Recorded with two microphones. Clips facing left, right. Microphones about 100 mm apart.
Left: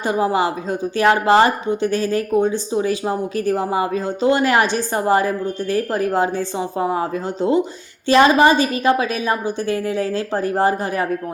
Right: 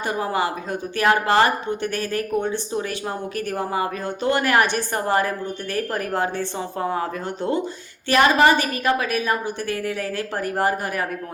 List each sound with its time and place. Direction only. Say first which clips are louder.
0.0 s a woman's voice: left 5 dB; 20° left (ahead or behind)